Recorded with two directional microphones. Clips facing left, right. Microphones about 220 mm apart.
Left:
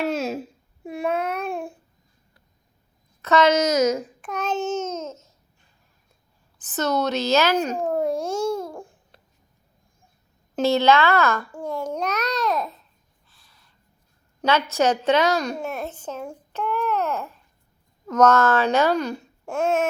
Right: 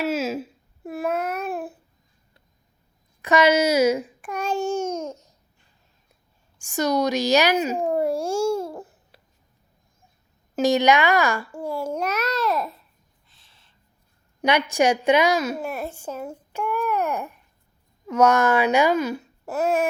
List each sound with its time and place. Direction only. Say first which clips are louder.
0.0 s babbling: even; 5° right (ahead or behind)
3.2 s a woman's voice: even; 15° right (ahead or behind)
4.0 s babbling: even; 10° right (ahead or behind)
6.6 s a child's voice: right 2 dB; 10° right (ahead or behind)
8.7 s babbling: right 1 dB; 5° right (ahead or behind)
10.5 s a child's voice: even; 15° right (ahead or behind)
13.2 s a sound: left 3 dB; 25° right (ahead or behind)
14.4 s a woman's voice: right 1 dB; 15° right (ahead or behind)